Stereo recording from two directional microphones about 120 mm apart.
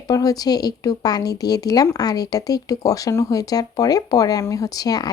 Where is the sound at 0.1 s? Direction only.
30° left (ahead or behind).